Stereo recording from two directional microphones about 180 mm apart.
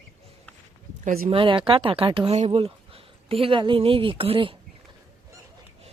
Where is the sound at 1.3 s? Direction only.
30° right (ahead or behind).